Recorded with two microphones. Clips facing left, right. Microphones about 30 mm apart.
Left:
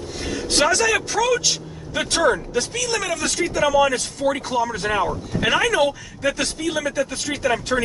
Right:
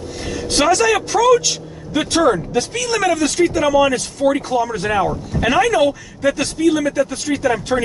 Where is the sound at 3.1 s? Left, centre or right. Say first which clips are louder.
Right 6 dB; centre.